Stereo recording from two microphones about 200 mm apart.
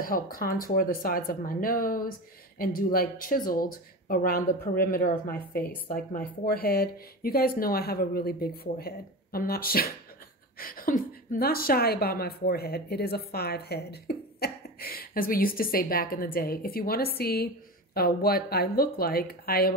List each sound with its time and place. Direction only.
0.0 s speech: 45° left (ahead or behind)